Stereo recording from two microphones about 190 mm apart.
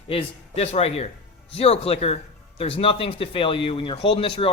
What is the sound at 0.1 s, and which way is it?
Speech, 30° left (ahead or behind).